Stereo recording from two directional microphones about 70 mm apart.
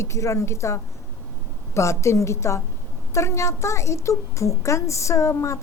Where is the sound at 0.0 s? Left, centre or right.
Left.